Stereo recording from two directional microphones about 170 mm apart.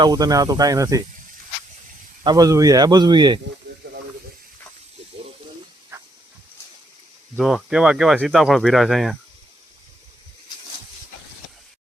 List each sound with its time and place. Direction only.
0.0 s speech: 25° right (ahead or behind)
2.2 s speech: 20° right (ahead or behind)
7.3 s speech: 5° right (ahead or behind)